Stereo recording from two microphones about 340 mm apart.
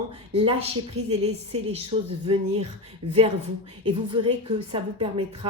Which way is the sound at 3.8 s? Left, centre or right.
Centre.